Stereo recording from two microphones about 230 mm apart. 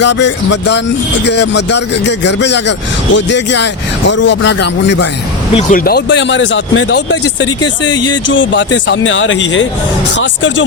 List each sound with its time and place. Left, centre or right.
0.0 s speech: left
5.5 s speech: left